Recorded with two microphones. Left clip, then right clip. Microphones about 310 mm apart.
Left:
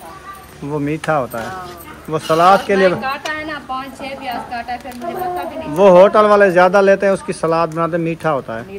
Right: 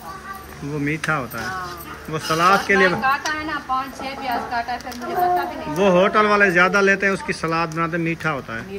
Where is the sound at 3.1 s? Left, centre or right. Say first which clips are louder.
Right 1 dB; centre.